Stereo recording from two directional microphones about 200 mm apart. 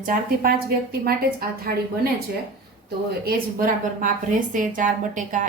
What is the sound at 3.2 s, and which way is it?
A woman's voice, 45° right (ahead or behind).